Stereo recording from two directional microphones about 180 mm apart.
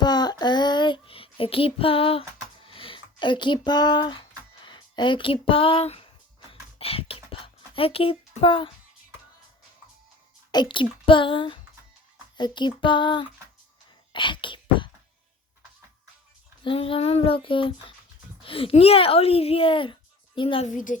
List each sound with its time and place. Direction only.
0.0 s a sound: 25° left (ahead or behind)
10.5 s a child's voice: 25° left (ahead or behind)
14.1 s wail: 25° left (ahead or behind)
16.6 s child singing: 30° left (ahead or behind)
18.4 s speech: 30° left (ahead or behind)
20.7 s a woman's voice: 45° left (ahead or behind)